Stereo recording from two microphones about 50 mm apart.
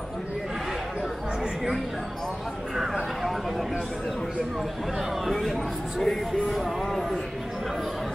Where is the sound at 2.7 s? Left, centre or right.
Centre.